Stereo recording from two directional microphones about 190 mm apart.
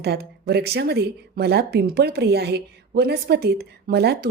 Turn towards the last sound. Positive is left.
turn(degrees=-60)  # may be behind; listen again after turning